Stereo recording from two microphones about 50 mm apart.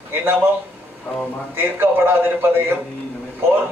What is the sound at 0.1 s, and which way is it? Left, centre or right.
Speech, right.